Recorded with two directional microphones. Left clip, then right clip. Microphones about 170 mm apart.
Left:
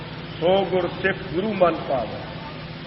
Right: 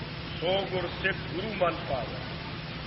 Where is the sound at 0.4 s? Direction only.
30° left (ahead or behind).